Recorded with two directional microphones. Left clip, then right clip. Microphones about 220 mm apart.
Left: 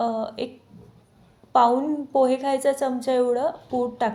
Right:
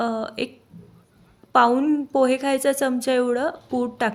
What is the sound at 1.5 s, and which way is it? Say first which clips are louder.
Speech: right 1 dB; 40° right (ahead or behind).